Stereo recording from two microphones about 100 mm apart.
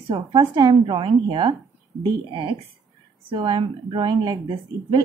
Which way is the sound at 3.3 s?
50° right (ahead or behind).